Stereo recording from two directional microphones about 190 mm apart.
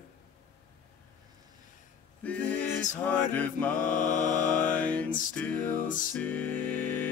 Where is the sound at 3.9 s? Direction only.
40° left (ahead or behind).